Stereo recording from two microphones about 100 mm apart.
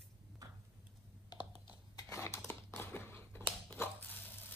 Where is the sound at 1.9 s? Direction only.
30° left (ahead or behind).